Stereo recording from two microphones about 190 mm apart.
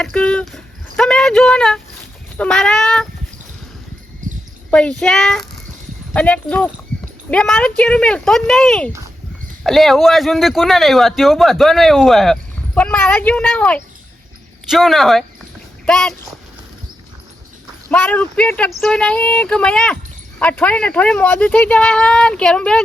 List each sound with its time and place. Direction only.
0.0 s a man's voice: 5° left (ahead or behind)
4.2 s a sound: 40° right (ahead or behind)
4.7 s a man's voice: 5° left (ahead or behind)
17.9 s a man's voice: 5° left (ahead or behind)